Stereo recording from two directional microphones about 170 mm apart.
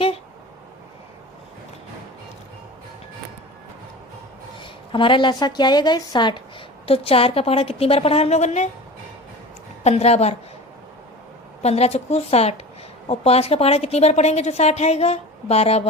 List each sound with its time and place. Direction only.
4.6 s a woman's voice: 30° left (ahead or behind)
9.8 s a woman's voice: 40° left (ahead or behind)
11.6 s a woman's voice: 40° left (ahead or behind)